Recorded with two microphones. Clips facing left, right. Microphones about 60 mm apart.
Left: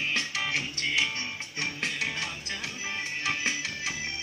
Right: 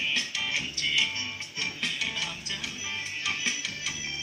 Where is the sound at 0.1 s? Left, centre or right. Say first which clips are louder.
Left 1 dB; left.